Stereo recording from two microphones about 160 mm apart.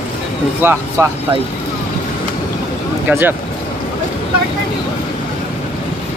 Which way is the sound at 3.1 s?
15° right (ahead or behind).